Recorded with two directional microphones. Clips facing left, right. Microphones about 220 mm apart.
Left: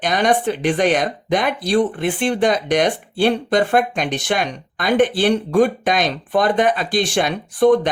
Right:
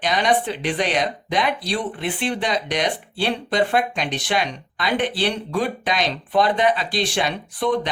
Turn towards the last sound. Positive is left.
turn(degrees=45)  # may be behind; listen again after turning